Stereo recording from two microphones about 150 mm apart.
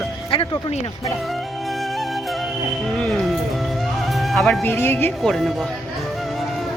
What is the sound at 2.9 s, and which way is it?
Music, 5° left (ahead or behind).